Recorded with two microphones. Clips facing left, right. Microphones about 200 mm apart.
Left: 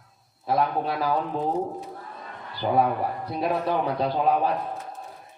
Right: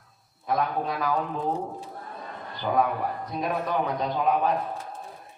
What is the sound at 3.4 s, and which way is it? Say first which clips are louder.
Speech: left 2 dB; 30° left (ahead or behind).